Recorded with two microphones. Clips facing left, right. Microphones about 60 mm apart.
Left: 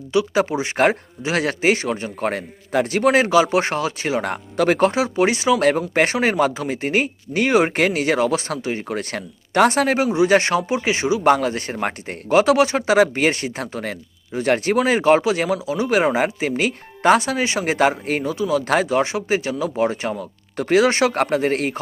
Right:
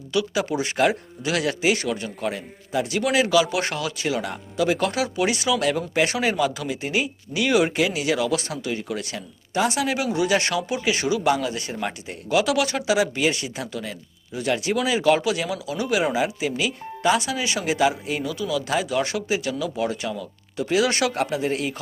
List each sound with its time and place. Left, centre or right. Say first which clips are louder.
0.1 s speech: left 5 dB; left
4.3 s speech: left 4 dB; left
4.8 s speech: left 6 dB; left
7.8 s speech: left 4 dB; left
11.2 s speech: left 5 dB; left
12.9 s speech: left 5 dB; left
16.0 s speech: left 4 dB; left
21.2 s speech: left 5 dB; left